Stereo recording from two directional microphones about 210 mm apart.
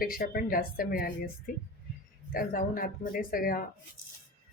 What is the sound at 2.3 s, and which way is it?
Speech, 45° left (ahead or behind).